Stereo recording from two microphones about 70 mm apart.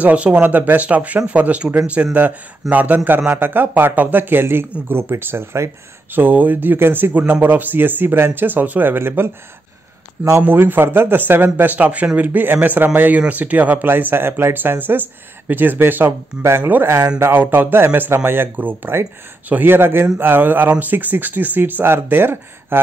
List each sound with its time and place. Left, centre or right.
0.0 s a man's voice: right
6.1 s speech: right
10.4 s a man's voice: right